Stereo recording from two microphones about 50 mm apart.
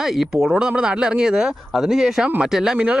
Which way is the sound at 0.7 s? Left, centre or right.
Centre.